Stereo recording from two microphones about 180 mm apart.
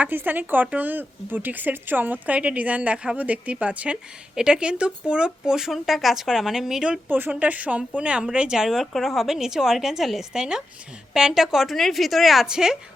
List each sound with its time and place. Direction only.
0.0 s a woman's voice: 10° right (ahead or behind)